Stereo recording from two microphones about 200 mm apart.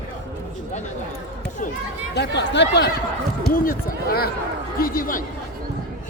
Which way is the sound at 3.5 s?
45° left (ahead or behind).